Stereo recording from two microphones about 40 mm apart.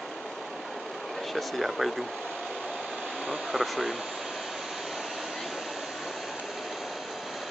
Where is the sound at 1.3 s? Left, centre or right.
Centre.